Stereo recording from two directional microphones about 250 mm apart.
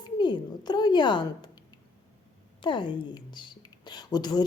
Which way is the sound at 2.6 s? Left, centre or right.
Centre.